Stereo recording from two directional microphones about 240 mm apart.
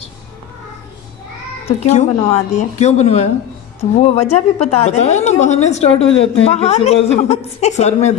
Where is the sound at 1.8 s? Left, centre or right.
Left.